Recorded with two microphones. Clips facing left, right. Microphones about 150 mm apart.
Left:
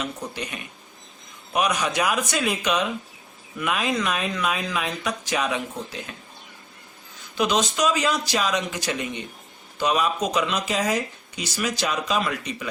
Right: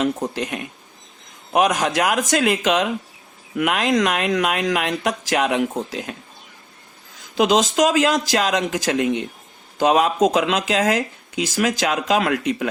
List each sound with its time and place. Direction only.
0.3 s speech: 90° right
7.3 s speech: 90° right